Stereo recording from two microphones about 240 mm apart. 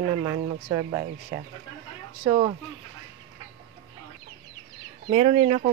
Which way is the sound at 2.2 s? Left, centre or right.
Right.